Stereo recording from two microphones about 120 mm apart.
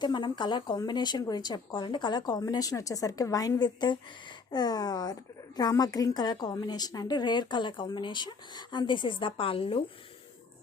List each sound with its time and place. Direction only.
0.0 s a woman's voice: 40° left (ahead or behind)